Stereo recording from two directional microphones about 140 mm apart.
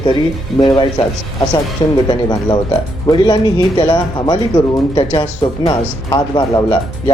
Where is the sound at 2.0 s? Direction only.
30° left (ahead or behind).